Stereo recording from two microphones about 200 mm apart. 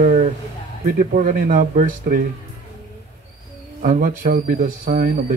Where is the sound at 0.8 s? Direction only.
45° right (ahead or behind).